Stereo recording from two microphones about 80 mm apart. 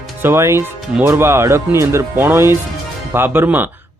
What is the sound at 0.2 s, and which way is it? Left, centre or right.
Speech, right.